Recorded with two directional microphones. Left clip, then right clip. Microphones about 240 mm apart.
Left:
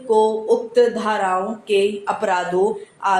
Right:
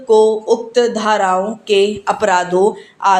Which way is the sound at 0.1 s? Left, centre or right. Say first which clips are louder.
Right 5 dB; right.